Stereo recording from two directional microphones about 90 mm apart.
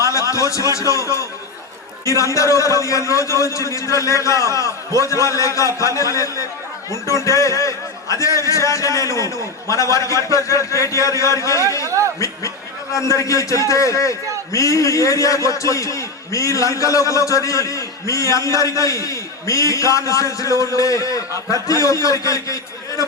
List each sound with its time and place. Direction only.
0.0 s a man's voice: 35° left (ahead or behind)
11.9 s chuckle: 35° right (ahead or behind)
12.9 s a man's voice: 35° left (ahead or behind)